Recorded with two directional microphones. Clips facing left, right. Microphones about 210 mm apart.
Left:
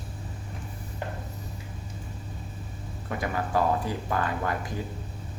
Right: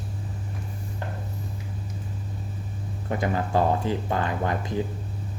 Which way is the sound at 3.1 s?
25° right (ahead or behind).